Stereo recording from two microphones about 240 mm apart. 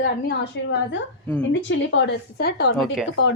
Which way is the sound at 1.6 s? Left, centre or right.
Left.